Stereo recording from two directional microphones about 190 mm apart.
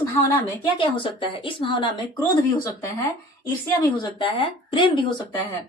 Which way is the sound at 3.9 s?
25° left (ahead or behind).